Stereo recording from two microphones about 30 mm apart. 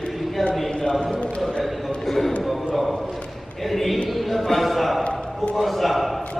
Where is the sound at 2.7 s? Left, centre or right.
Centre.